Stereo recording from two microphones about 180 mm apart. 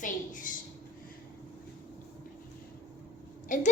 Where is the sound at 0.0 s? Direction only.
45° left (ahead or behind).